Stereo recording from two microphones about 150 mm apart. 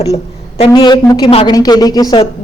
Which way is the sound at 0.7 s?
25° left (ahead or behind).